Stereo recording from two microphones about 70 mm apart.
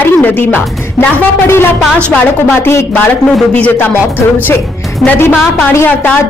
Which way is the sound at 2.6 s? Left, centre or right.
Left.